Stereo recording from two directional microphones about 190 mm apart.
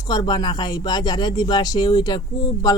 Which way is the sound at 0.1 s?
20° left (ahead or behind).